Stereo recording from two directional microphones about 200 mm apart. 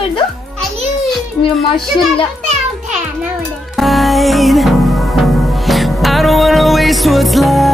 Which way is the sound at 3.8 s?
Centre (ahead or behind).